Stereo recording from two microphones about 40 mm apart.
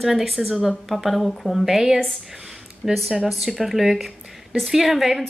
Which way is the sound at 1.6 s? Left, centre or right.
Centre.